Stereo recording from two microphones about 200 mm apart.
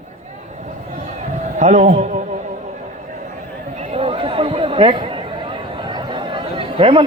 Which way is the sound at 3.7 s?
35° right (ahead or behind).